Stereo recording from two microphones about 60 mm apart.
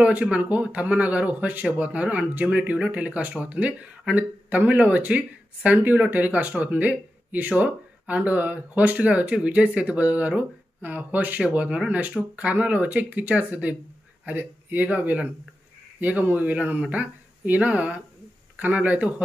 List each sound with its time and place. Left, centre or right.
0.0 s speech: right